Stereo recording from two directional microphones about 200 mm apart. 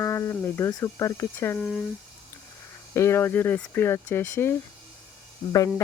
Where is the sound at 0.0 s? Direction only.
15° left (ahead or behind).